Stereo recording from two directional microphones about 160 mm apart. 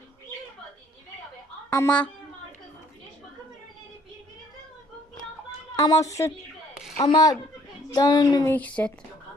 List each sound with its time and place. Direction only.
1.7 s speech: 10° left (ahead or behind)
5.7 s a woman's voice: 20° left (ahead or behind)
8.5 s speech: 10° left (ahead or behind)